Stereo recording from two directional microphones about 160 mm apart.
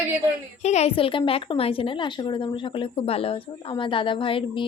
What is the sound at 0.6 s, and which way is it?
A woman's voice, 45° left (ahead or behind).